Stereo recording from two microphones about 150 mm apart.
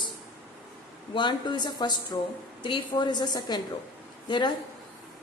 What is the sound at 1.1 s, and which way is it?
A woman's voice, 30° left (ahead or behind).